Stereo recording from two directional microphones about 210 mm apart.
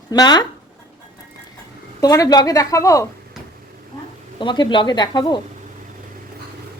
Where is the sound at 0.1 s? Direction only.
20° left (ahead or behind).